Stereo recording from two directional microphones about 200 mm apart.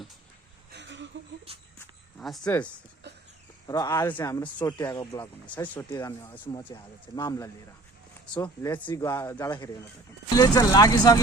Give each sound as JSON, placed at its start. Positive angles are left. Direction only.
{"t": 0.7, "sound": "a sound", "side_deg": -65}
{"t": 1.5, "sound": "speech", "side_deg": -30}
{"t": 2.1, "sound": "speech", "side_deg": 0}
{"t": 3.7, "sound": "speech", "side_deg": 15}